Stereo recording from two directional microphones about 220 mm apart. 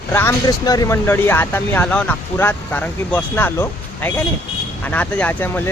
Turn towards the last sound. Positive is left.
turn(degrees=10)  # may be behind; listen again after turning